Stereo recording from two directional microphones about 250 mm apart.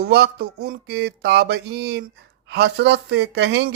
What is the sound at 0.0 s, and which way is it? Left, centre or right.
Speech, right.